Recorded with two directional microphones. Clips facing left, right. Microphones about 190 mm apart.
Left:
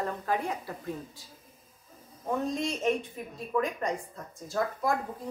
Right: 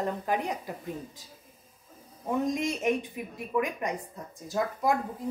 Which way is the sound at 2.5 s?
15° right (ahead or behind).